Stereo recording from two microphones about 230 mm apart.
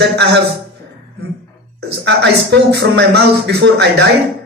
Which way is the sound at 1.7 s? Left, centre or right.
Right.